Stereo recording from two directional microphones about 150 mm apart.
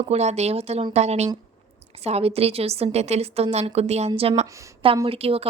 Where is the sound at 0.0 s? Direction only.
45° right (ahead or behind).